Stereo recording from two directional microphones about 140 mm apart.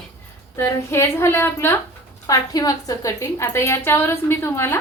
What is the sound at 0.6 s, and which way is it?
A woman's voice, 20° left (ahead or behind).